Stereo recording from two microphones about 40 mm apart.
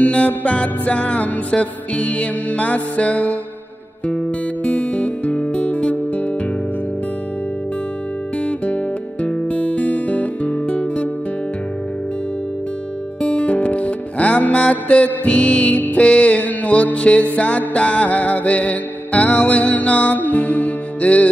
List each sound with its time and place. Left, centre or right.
0.0 s music: left
4.6 s music: left
9.2 s music: left
13.2 s music: left